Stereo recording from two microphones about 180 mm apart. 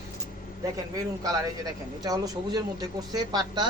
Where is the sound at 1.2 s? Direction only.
20° right (ahead or behind).